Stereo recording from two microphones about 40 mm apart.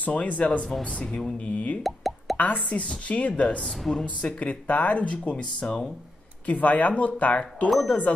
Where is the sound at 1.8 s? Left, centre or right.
Centre.